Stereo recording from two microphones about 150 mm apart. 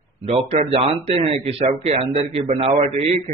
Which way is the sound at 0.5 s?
40° right (ahead or behind).